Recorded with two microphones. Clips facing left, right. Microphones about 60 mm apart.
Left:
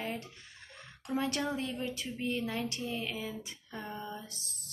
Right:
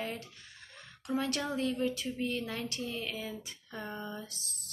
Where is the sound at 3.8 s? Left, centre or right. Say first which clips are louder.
Right 1 dB; centre.